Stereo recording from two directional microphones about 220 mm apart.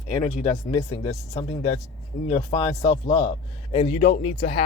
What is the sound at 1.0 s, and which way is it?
Speech, 30° left (ahead or behind).